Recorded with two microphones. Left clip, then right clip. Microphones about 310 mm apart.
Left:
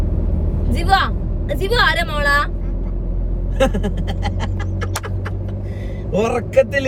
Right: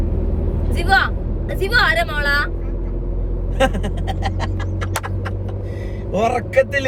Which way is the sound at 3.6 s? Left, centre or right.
Centre.